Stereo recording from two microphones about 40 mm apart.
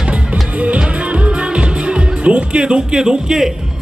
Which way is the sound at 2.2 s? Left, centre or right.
Right.